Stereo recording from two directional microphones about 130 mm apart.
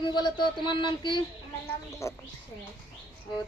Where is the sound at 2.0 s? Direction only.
20° left (ahead or behind).